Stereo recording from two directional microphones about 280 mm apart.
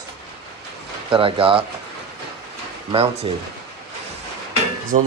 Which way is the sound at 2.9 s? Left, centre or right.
Right.